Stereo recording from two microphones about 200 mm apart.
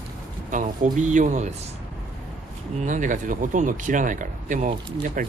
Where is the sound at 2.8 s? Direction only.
40° right (ahead or behind).